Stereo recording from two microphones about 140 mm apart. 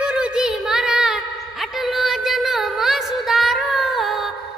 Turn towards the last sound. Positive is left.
turn(degrees=0)  # may be behind; listen again after turning